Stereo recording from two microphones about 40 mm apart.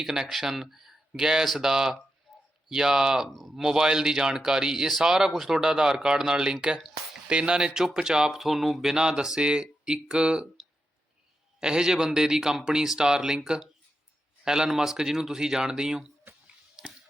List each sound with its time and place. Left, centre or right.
0.0 s speech: centre
2.3 s a sound: left
2.6 s speech: centre
3.2 s speech: centre
3.5 s speech: centre
8.4 s speech: centre
11.6 s a man's voice: centre